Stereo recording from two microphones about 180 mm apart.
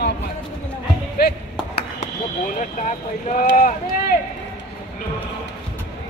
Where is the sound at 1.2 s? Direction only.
60° left (ahead or behind).